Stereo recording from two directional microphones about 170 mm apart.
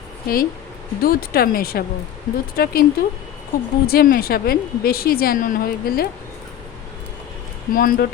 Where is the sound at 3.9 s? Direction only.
65° left (ahead or behind).